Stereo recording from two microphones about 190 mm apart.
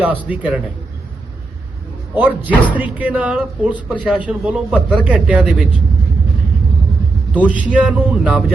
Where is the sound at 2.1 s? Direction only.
10° right (ahead or behind).